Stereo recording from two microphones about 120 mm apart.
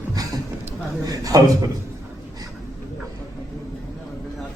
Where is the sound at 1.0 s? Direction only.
30° right (ahead or behind).